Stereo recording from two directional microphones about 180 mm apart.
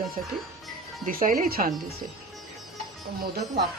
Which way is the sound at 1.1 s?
50° right (ahead or behind).